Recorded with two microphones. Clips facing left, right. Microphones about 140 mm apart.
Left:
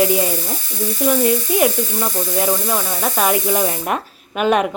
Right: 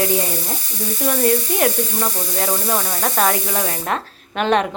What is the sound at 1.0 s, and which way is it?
Speech, 5° left (ahead or behind).